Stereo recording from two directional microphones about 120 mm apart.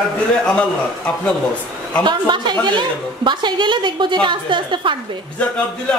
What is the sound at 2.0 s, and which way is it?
A woman's voice, 40° right (ahead or behind).